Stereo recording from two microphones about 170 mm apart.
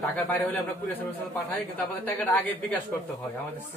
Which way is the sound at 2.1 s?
10° left (ahead or behind).